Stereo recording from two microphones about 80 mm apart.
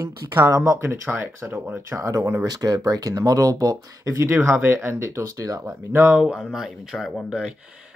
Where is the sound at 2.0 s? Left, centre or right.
Right.